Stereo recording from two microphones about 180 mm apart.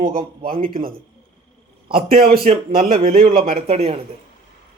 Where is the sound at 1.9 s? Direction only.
30° right (ahead or behind).